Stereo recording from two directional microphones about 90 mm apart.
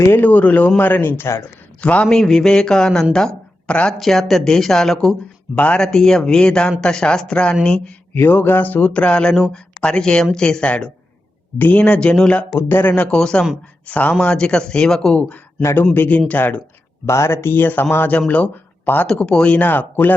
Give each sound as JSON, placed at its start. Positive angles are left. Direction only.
{"t": 0.1, "sound": "speech", "side_deg": 20}
{"t": 1.8, "sound": "speech", "side_deg": 15}
{"t": 8.1, "sound": "speech", "side_deg": 25}
{"t": 12.5, "sound": "speech", "side_deg": 25}
{"t": 17.1, "sound": "speech", "side_deg": 30}